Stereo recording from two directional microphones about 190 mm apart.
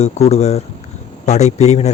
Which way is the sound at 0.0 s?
35° left (ahead or behind).